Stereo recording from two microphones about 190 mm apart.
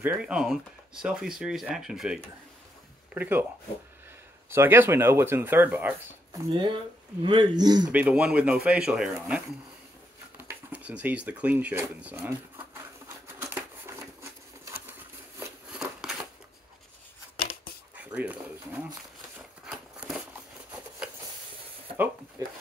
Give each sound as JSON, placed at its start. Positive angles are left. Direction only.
{"t": 0.0, "sound": "speech", "side_deg": -5}
{"t": 4.5, "sound": "speech", "side_deg": -10}
{"t": 6.5, "sound": "speech", "side_deg": -25}
{"t": 7.9, "sound": "speech", "side_deg": -5}
{"t": 13.4, "sound": "a sound", "side_deg": -10}
{"t": 15.8, "sound": "scissors", "side_deg": -5}
{"t": 17.9, "sound": "a sound", "side_deg": -5}